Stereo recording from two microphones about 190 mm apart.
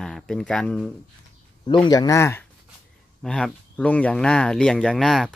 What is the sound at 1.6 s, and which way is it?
Speech, 25° left (ahead or behind).